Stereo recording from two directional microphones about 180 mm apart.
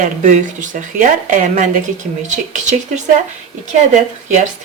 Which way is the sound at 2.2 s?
40° right (ahead or behind).